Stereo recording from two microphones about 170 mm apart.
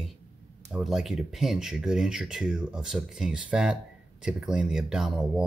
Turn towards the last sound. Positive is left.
turn(degrees=-5)  # may be behind; listen again after turning